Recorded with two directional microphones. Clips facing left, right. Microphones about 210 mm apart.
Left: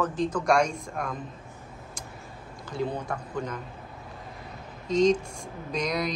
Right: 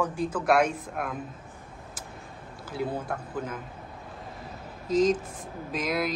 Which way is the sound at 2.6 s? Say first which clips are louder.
Left 1 dB; 5° right (ahead or behind).